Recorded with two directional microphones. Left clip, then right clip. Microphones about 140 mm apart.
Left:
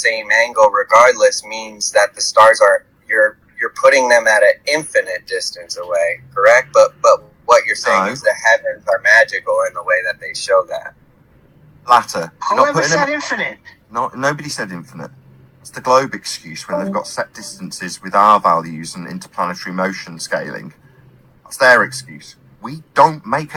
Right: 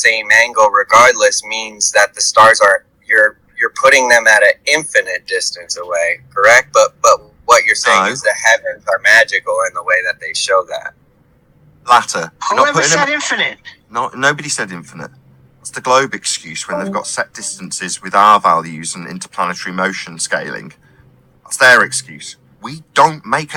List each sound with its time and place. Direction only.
0.0 s speech: 15° right (ahead or behind)
11.9 s speech: 15° right (ahead or behind)